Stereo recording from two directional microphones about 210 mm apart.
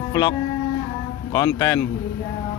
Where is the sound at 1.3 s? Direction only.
15° left (ahead or behind).